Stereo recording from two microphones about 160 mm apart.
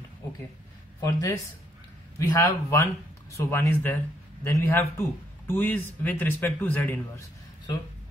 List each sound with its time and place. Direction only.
1.0 s a man's voice: 20° left (ahead or behind)